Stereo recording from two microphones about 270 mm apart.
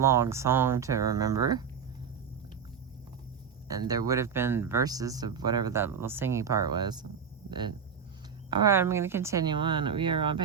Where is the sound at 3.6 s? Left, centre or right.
Centre.